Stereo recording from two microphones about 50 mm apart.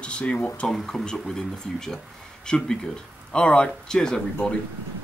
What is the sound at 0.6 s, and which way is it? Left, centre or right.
Speech, centre.